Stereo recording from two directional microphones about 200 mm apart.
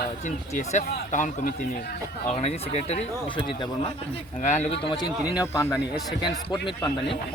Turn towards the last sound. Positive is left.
turn(degrees=20)  # may be behind; listen again after turning